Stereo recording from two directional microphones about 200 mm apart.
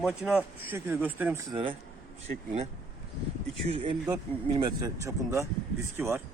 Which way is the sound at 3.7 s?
30° right (ahead or behind).